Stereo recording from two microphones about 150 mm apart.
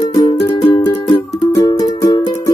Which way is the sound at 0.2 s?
50° left (ahead or behind).